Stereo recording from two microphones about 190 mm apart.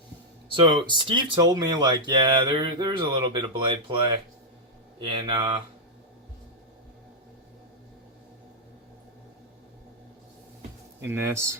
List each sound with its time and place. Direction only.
0.4 s speech: 25° right (ahead or behind)
11.0 s speech: 15° right (ahead or behind)